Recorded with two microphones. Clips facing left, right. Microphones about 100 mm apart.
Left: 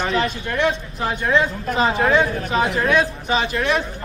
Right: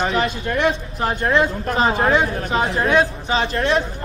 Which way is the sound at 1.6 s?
35° right (ahead or behind).